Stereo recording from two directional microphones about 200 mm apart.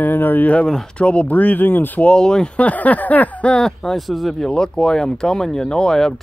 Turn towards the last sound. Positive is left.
turn(degrees=0)  # may be behind; listen again after turning